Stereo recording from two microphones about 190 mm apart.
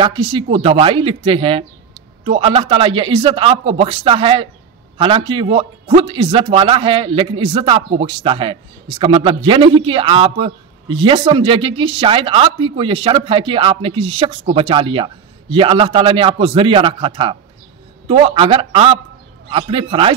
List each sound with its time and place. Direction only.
0.0 s a man's voice: 25° right (ahead or behind)